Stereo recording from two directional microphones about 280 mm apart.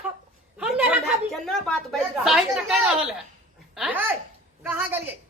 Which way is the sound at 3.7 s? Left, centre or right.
Centre.